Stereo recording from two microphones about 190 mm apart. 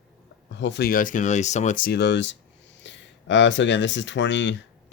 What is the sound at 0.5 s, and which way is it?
Speech, 65° left (ahead or behind).